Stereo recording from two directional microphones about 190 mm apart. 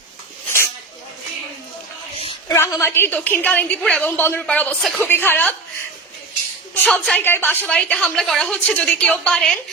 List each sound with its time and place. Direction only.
2.1 s a sound: 30° left (ahead or behind)
2.5 s a woman's voice: 15° left (ahead or behind)
6.8 s a woman's voice: 5° left (ahead or behind)